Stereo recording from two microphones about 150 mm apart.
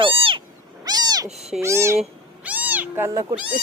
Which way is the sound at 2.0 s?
10° right (ahead or behind).